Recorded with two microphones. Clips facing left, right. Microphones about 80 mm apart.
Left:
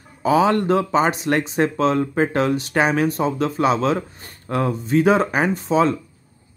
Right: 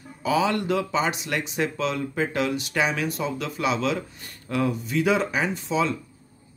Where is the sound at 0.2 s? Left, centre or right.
Left.